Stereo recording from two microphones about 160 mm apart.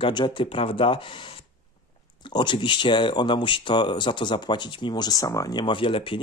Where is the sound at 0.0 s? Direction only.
30° left (ahead or behind).